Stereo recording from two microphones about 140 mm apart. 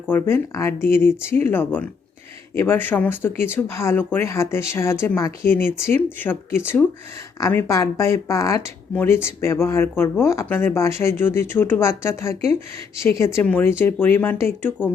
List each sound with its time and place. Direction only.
0.1 s speech: 15° left (ahead or behind)